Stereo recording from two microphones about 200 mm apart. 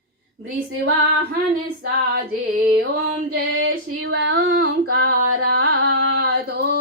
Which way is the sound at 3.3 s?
60° right (ahead or behind).